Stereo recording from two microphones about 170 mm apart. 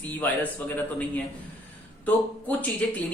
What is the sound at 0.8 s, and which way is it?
Speech, 10° left (ahead or behind).